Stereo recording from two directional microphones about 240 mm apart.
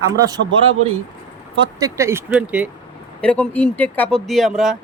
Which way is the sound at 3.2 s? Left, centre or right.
Centre.